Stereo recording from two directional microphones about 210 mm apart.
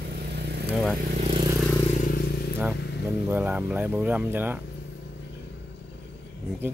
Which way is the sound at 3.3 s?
10° right (ahead or behind).